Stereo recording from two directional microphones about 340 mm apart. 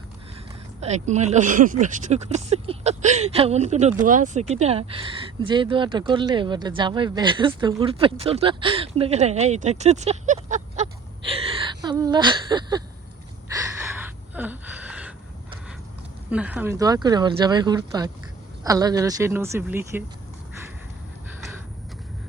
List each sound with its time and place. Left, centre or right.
0.8 s speech: centre
13.5 s a sound: centre
16.3 s speech: centre